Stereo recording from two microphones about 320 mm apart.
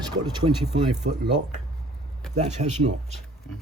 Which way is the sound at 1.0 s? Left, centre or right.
Right.